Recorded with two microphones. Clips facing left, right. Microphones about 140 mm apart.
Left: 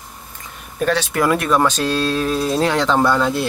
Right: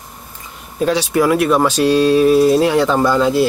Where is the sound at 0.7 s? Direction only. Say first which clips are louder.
Right 4 dB; 15° right (ahead or behind).